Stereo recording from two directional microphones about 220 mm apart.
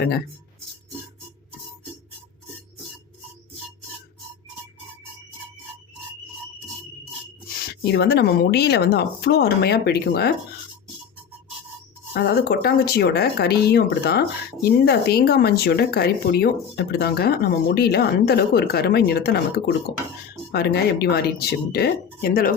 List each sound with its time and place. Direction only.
7.8 s speech: 50° left (ahead or behind)
12.1 s speech: 50° left (ahead or behind)